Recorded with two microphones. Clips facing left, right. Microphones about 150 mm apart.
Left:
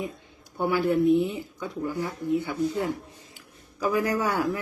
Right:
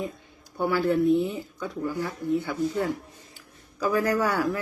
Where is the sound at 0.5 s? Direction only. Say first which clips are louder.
Even; 20° left (ahead or behind).